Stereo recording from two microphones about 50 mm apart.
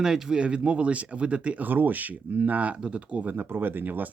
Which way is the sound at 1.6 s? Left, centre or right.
Right.